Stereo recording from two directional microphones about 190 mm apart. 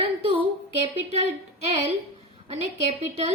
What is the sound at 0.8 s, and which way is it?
Speech, 35° right (ahead or behind).